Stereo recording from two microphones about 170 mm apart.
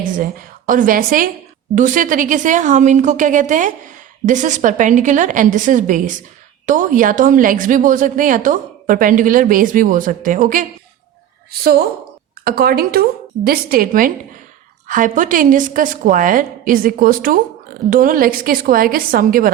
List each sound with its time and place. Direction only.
0.2 s a woman's voice: 55° right (ahead or behind)
12.5 s a woman's voice: 60° right (ahead or behind)